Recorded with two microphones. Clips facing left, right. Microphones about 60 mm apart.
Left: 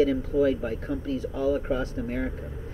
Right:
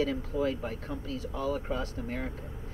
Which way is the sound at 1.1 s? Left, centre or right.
Centre.